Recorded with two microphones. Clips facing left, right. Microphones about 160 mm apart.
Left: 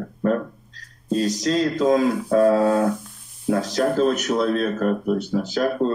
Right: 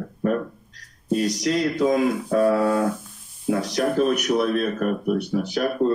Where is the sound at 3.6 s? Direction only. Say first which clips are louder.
Left 2 dB; 15° right (ahead or behind).